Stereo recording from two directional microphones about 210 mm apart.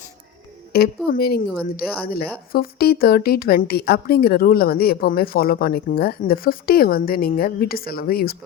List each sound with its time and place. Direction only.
0.7 s speech: 50° left (ahead or behind)